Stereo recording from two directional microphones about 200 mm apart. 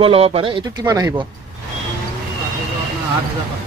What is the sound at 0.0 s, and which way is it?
A man's voice, 30° right (ahead or behind).